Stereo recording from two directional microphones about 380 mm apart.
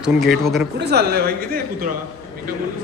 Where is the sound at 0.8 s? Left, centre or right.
Right.